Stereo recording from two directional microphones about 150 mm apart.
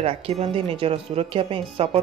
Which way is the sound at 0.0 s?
40° right (ahead or behind).